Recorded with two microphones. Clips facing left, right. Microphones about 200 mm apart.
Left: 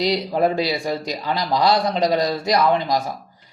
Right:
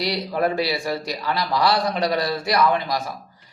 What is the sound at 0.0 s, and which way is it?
A man's voice, 20° left (ahead or behind).